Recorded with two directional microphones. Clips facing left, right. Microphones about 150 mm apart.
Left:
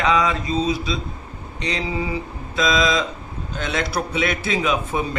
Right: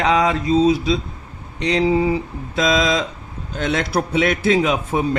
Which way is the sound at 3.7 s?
75° right (ahead or behind).